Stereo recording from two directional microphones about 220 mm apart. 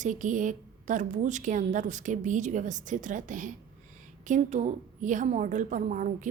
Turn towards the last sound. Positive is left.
turn(degrees=-35)  # may be behind; listen again after turning